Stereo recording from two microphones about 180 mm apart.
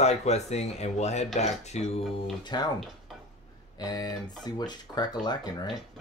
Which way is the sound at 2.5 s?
25° left (ahead or behind).